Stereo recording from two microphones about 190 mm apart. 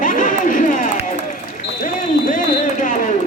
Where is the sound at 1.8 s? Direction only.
40° left (ahead or behind).